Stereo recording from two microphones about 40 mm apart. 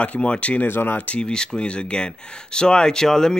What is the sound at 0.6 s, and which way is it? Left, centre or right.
Speech, left.